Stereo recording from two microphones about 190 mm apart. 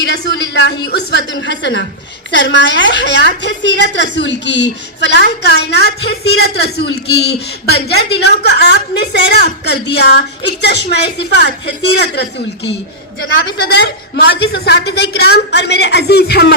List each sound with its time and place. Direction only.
0.1 s a woman's voice: 65° left (ahead or behind)